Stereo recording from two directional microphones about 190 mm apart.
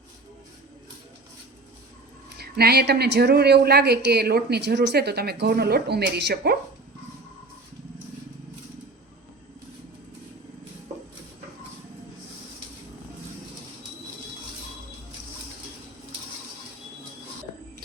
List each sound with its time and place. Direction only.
2.4 s speech: 55° right (ahead or behind)